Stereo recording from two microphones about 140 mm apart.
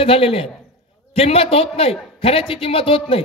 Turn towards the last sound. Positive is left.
turn(degrees=40)  # may be behind; listen again after turning